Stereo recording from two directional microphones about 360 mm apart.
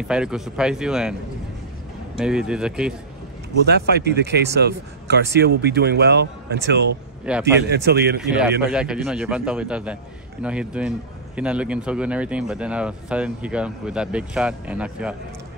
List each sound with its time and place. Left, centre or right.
0.1 s a man's voice: centre
2.1 s a man's voice: centre
3.6 s speech: right
7.2 s a man's voice: centre
7.7 s speech: right
8.7 s a man's voice: centre